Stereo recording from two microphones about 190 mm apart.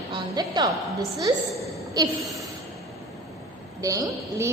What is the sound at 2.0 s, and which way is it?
Speech, 20° right (ahead or behind).